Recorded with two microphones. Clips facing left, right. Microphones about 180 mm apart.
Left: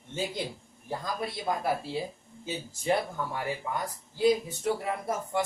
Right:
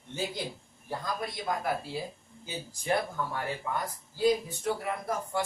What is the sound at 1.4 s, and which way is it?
A man's voice, 20° left (ahead or behind).